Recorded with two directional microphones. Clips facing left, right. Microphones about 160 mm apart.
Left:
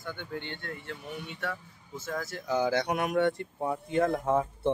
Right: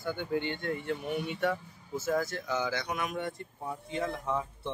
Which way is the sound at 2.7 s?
60° left (ahead or behind).